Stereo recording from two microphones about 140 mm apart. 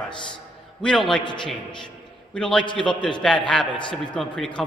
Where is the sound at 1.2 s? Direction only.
35° left (ahead or behind).